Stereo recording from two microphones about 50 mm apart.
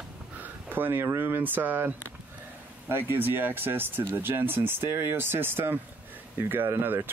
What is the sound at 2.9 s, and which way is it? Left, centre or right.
Speech, right.